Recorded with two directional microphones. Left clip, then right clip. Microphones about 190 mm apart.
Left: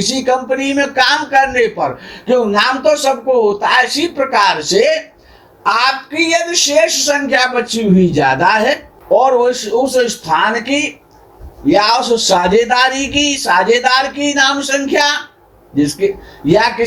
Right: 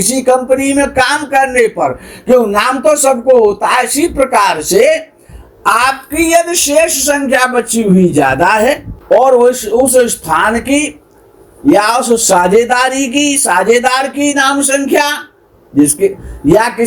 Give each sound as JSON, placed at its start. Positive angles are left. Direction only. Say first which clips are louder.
{"t": 0.1, "sound": "speech", "louder": "right 6 dB", "side_deg": -50}
{"t": 4.0, "sound": "speech", "louder": "right 4 dB", "side_deg": -35}
{"t": 4.4, "sound": "speech", "louder": "right 1 dB", "side_deg": -50}